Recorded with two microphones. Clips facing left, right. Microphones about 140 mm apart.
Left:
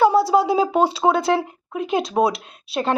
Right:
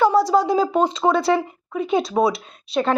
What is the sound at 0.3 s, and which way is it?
A woman's voice, 5° left (ahead or behind).